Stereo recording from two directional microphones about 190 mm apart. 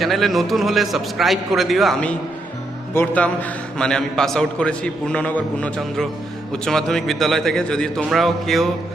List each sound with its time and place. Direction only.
0.0 s a man's voice: centre (ahead or behind)